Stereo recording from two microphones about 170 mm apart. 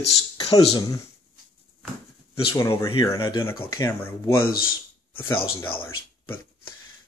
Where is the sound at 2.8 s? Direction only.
30° left (ahead or behind).